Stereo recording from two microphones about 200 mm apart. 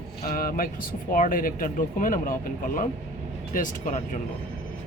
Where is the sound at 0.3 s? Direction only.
45° left (ahead or behind).